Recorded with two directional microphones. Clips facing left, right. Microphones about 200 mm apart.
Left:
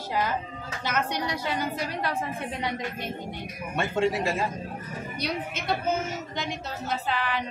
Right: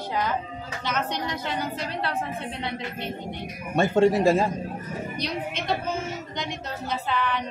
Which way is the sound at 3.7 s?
45° right (ahead or behind).